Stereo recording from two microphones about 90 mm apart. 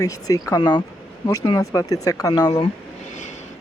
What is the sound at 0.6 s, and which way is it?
Speech, 55° left (ahead or behind).